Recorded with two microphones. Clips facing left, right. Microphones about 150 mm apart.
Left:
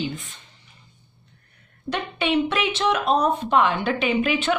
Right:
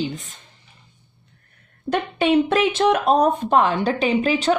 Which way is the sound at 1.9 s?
45° right (ahead or behind).